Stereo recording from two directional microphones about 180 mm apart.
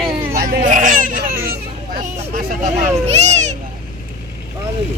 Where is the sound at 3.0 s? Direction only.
40° right (ahead or behind).